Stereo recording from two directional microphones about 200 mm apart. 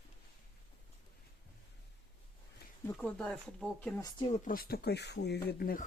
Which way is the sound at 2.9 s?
5° left (ahead or behind).